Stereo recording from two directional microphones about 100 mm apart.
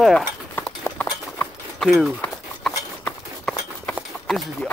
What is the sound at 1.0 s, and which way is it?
Clip-clop, 15° left (ahead or behind).